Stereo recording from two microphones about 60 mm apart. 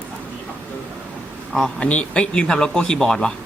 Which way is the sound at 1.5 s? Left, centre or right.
Centre.